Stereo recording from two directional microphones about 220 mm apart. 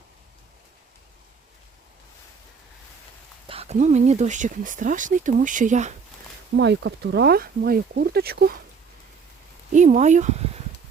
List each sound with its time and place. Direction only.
3.4 s speech: 25° right (ahead or behind)
6.6 s speech: 50° right (ahead or behind)
9.7 s speech: 35° right (ahead or behind)